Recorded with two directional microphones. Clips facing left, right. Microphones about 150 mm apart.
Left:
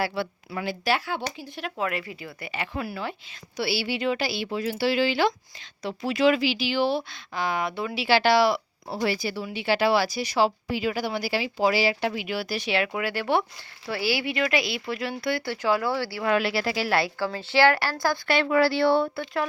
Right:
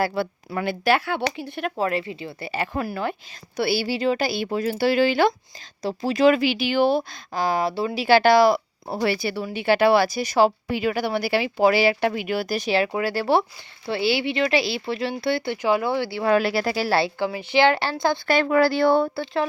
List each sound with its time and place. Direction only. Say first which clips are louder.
0.0 s speech: right 4 dB; 45° right (ahead or behind)
1.7 s speech: right 4 dB; 30° right (ahead or behind); by 5.3 s 50° right (ahead or behind)
5.8 s speech: right 4 dB; 35° right (ahead or behind)
8.0 s speech: right 5 dB; 50° right (ahead or behind); by 16.2 s 20° right (ahead or behind)
16.2 s speech: right 4 dB; 40° right (ahead or behind)
17.2 s speech: right 2 dB; 15° right (ahead or behind)
18.3 s speech: right 2 dB; 45° right (ahead or behind)